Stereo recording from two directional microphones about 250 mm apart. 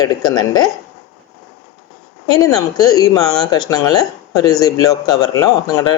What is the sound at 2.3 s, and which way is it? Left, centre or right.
Speech, centre.